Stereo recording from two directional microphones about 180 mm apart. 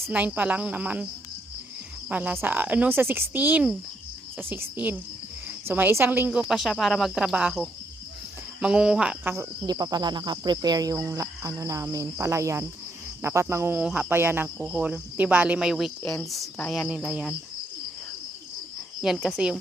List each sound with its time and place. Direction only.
0.0 s cricket: 10° right (ahead or behind)
2.0 s cricket: 10° right (ahead or behind)
5.5 s speech: 10° right (ahead or behind)
6.5 s cricket: centre (ahead or behind)
9.3 s cricket: 20° right (ahead or behind)
19.0 s cricket: centre (ahead or behind)